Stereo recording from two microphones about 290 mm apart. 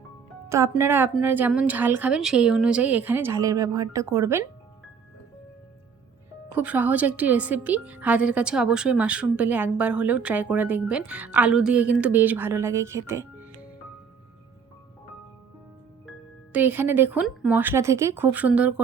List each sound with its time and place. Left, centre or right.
0.4 s a woman's voice: centre
6.6 s a woman's voice: centre
16.5 s a woman's voice: centre